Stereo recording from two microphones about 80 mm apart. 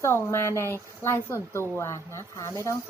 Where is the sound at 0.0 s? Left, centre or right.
Left.